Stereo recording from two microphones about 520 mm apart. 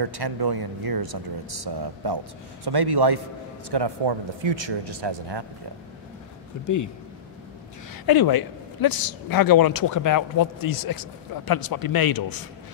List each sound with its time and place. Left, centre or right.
0.0 s speech: right
6.6 s speech: left
8.1 s speech: left